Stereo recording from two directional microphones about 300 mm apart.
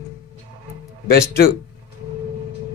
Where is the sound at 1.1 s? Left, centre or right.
Left.